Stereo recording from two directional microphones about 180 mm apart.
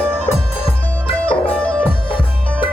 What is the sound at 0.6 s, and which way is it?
Music, 30° left (ahead or behind).